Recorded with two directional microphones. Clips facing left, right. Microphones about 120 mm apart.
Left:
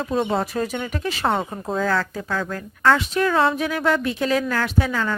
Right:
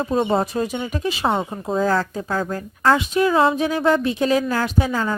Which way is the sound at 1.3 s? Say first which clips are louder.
Right 1 dB; centre (ahead or behind).